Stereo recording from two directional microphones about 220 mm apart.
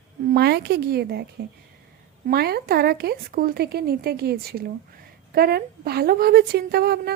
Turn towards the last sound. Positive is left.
turn(degrees=-45)  # may be behind; listen again after turning